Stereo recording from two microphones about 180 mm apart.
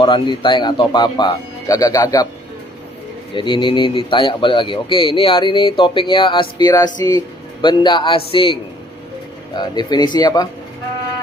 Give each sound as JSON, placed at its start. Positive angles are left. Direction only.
{"t": 0.0, "sound": "speech", "side_deg": 25}
{"t": 3.3, "sound": "speech", "side_deg": 25}
{"t": 9.6, "sound": "speech", "side_deg": 25}